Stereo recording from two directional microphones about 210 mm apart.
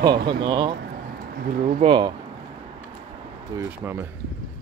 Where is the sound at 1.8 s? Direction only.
25° right (ahead or behind).